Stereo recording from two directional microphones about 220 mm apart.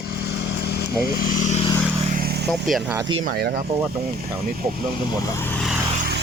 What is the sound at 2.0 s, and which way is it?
Vehicle, 40° right (ahead or behind).